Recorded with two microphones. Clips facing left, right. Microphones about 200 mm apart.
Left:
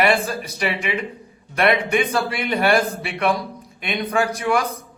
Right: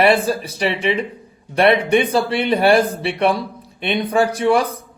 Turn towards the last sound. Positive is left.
turn(degrees=-30)  # may be behind; listen again after turning